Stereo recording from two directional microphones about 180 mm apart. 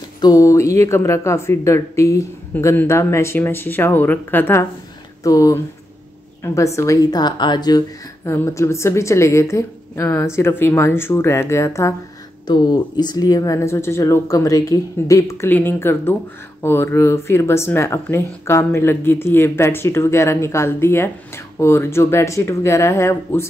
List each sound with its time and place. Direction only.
0.2 s a woman's voice: 20° left (ahead or behind)